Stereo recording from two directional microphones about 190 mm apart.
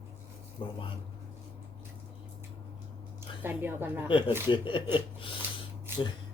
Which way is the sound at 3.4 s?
10° right (ahead or behind).